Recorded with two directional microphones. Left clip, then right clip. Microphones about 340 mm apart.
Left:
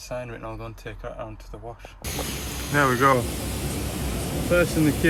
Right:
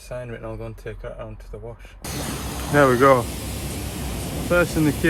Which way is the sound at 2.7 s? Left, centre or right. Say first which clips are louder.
Right 4 dB; centre.